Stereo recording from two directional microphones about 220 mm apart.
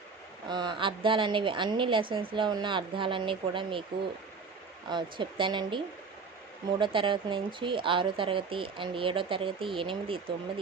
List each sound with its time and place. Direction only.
0.4 s speech: 20° right (ahead or behind)
4.9 s speech: 20° right (ahead or behind)